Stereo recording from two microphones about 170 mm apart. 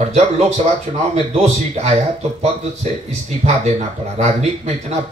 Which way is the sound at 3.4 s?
40° right (ahead or behind).